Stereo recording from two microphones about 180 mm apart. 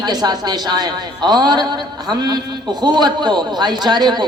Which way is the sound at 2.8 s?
25° right (ahead or behind).